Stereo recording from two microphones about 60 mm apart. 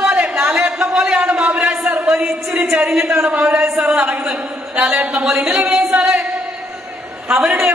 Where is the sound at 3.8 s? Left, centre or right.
Centre.